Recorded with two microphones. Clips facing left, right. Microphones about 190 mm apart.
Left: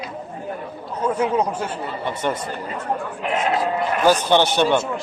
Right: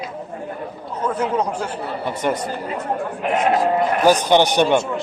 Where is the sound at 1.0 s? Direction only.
10° left (ahead or behind).